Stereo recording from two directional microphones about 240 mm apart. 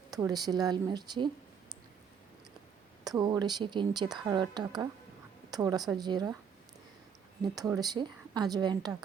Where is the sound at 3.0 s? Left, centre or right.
Centre.